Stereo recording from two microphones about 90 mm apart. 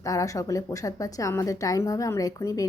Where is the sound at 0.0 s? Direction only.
40° left (ahead or behind).